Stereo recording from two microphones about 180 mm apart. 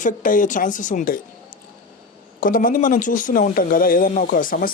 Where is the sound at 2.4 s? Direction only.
50° left (ahead or behind).